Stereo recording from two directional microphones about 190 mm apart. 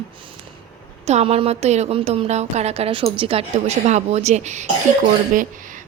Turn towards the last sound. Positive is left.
turn(degrees=-45)  # may be behind; listen again after turning